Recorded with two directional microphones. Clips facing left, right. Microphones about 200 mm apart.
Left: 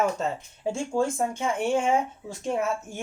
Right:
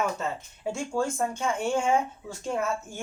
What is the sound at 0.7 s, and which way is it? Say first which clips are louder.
A woman's voice: left 2 dB; 20° left (ahead or behind).